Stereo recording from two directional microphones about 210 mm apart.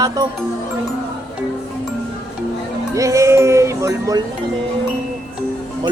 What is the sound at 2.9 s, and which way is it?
Speech, 15° right (ahead or behind).